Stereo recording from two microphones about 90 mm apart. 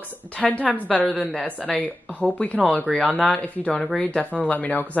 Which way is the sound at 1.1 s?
15° right (ahead or behind).